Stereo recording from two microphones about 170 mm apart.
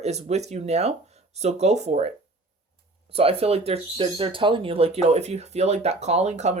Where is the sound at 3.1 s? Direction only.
35° right (ahead or behind).